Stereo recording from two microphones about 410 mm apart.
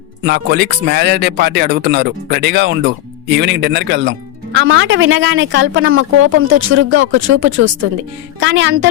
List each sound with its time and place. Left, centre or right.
0.3 s a woman's voice: right